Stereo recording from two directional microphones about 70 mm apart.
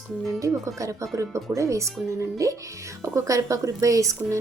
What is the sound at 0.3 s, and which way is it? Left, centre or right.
A woman's voice, right.